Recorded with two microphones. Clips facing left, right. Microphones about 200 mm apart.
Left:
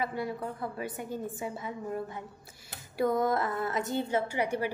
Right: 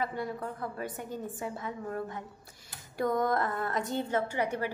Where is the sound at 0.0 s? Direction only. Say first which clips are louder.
Left 1 dB; 10° left (ahead or behind).